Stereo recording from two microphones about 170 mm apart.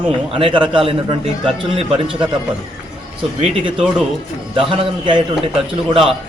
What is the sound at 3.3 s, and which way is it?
Speech, 35° right (ahead or behind).